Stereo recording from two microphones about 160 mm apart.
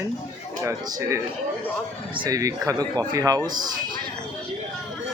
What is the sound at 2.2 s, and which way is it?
Speech, 20° right (ahead or behind).